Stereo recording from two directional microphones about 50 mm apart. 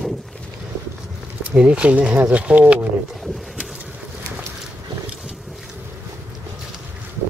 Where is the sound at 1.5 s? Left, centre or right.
Right.